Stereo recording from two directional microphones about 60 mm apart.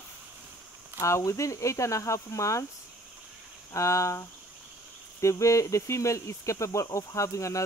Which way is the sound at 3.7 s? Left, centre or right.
Left.